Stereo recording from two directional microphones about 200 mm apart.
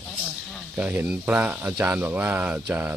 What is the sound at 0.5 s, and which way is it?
Speech, 10° right (ahead or behind).